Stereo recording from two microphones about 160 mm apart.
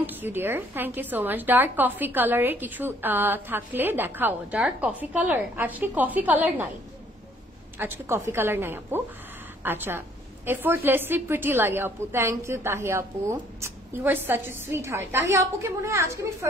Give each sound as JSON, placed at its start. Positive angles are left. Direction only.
{"t": 0.0, "sound": "a woman's voice", "side_deg": -10}
{"t": 7.8, "sound": "a woman's voice", "side_deg": -15}